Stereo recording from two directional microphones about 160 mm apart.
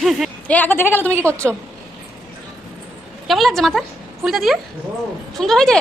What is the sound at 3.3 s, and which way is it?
A woman's voice, centre (ahead or behind).